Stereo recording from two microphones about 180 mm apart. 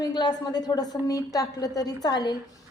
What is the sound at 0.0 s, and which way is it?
A woman's voice, 20° left (ahead or behind).